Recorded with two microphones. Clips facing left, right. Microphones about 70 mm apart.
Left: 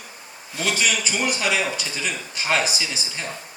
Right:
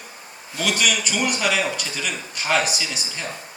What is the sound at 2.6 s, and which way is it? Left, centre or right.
Speech, right.